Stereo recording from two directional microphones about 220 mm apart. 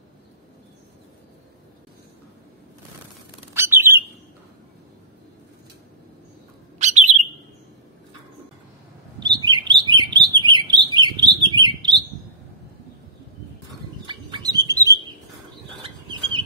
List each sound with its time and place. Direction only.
3.5 s bird: 10° right (ahead or behind)
6.8 s bird: 30° right (ahead or behind)
9.2 s chirp: 20° right (ahead or behind)
14.0 s bird: 20° right (ahead or behind)
15.8 s a sound: 20° right (ahead or behind)